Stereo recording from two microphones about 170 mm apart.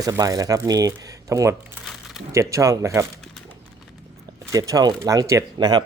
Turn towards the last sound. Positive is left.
turn(degrees=-25)  # may be behind; listen again after turning